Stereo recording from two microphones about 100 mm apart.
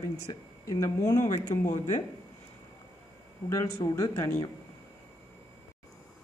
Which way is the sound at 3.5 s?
30° left (ahead or behind).